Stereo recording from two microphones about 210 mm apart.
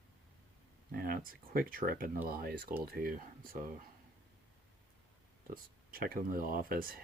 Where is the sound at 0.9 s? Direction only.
45° right (ahead or behind).